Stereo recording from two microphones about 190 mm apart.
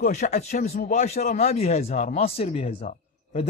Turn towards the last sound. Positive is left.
turn(degrees=30)  # may be behind; listen again after turning